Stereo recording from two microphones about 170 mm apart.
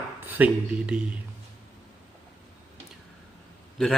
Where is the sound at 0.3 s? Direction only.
10° right (ahead or behind).